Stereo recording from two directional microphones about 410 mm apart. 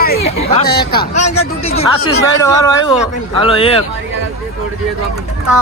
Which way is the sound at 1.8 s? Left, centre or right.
Centre.